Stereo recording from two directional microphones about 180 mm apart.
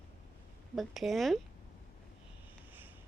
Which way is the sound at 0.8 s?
Centre (ahead or behind).